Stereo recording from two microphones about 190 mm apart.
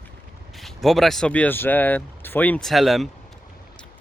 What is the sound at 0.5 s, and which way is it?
Speech, centre (ahead or behind).